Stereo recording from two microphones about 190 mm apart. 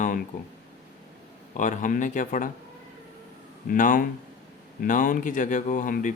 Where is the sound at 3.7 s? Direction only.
45° left (ahead or behind).